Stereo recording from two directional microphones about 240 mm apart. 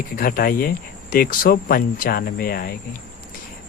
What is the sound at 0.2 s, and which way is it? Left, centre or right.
Speech, left.